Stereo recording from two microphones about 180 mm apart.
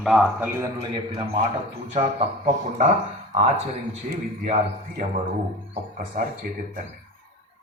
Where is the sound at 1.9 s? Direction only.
40° right (ahead or behind).